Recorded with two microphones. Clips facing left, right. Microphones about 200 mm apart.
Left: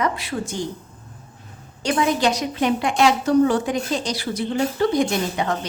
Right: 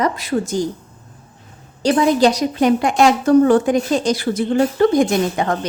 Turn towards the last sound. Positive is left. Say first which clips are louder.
# right 5 dB
turn(degrees=-50)  # may be behind; listen again after turning